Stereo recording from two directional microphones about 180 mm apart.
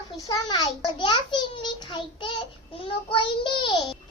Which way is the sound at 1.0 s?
25° left (ahead or behind).